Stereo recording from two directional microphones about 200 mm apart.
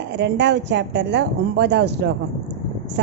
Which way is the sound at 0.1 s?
60° right (ahead or behind).